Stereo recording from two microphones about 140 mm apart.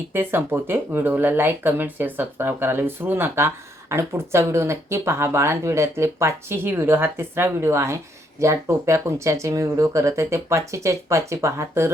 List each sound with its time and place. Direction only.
0.1 s speech: 15° right (ahead or behind)